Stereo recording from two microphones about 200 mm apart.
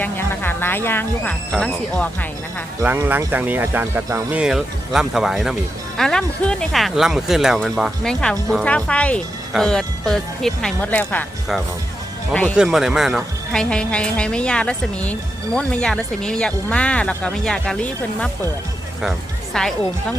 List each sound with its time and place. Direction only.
0.0 s speech: 10° left (ahead or behind)
2.8 s speech: 10° right (ahead or behind); by 18.3 s 5° left (ahead or behind)
19.5 s speech: 5° left (ahead or behind)